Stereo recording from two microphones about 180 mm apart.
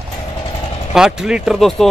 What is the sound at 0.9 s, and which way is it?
Speech, 5° right (ahead or behind).